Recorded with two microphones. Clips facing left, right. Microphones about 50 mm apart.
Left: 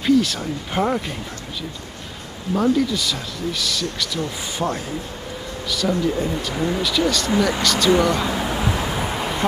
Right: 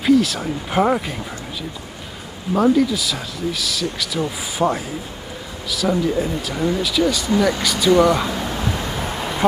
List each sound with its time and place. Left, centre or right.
0.0 s speech: centre
2.5 s speech: centre
8.4 s vehicle: centre